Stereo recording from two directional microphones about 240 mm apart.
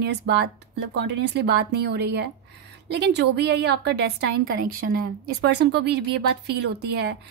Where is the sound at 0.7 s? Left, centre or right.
Right.